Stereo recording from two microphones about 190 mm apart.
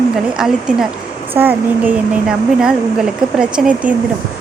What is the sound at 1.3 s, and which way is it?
Speech, 10° right (ahead or behind).